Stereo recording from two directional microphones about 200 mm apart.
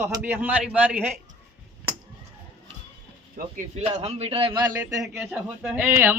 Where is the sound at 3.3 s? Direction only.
35° right (ahead or behind).